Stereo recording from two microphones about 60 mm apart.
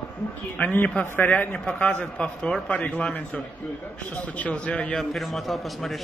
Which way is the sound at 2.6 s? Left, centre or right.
Left.